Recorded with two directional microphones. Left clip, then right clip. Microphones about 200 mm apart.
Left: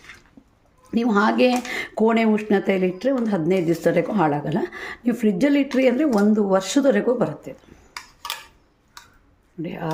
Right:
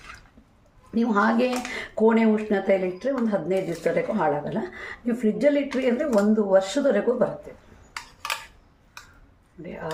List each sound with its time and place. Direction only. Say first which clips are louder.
0.9 s speech: left 2 dB; 45° left (ahead or behind)
9.6 s speech: left 4 dB; 50° left (ahead or behind)